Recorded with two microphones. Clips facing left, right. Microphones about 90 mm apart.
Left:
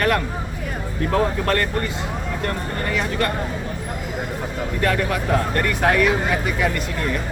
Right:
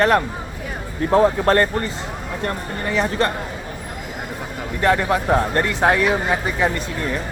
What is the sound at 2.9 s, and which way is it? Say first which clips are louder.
Speech: right 4 dB; 25° right (ahead or behind).